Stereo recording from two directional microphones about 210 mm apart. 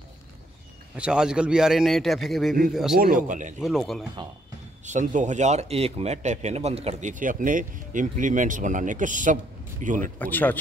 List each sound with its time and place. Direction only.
0.9 s a man's voice: 5° right (ahead or behind)
3.0 s speech: 40° right (ahead or behind)
3.6 s a man's voice: centre (ahead or behind)
4.8 s speech: 35° right (ahead or behind)
10.1 s speech: 10° left (ahead or behind)